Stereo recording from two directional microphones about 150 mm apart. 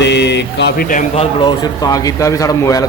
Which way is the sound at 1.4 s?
30° left (ahead or behind).